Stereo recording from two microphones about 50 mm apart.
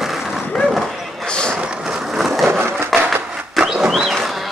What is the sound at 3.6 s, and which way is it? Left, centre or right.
Bird, centre.